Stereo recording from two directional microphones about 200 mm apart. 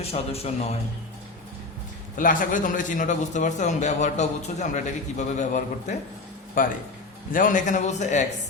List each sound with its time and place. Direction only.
0.1 s a man's voice: 30° left (ahead or behind)
2.1 s a man's voice: 40° left (ahead or behind)